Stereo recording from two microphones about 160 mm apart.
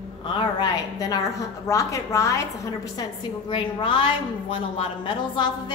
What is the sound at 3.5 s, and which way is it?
A woman's voice, 30° left (ahead or behind).